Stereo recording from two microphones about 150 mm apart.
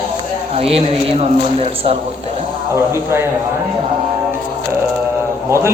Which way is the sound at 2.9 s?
15° right (ahead or behind).